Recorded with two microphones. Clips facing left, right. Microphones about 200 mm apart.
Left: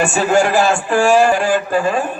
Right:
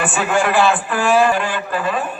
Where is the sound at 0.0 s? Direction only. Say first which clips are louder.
Left 4 dB; 40° left (ahead or behind).